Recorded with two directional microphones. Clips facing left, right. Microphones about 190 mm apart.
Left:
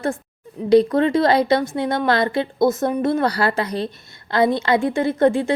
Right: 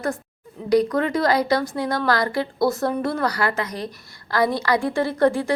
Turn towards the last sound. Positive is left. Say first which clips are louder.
# left 2 dB
turn(degrees=20)  # may be behind; listen again after turning